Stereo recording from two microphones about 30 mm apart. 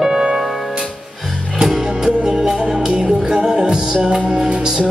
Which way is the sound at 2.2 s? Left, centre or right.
Right.